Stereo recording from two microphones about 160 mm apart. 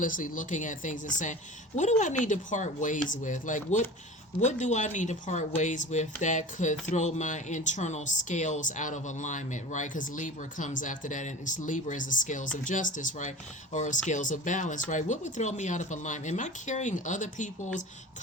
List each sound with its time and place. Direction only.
0.0 s speech: 55° left (ahead or behind)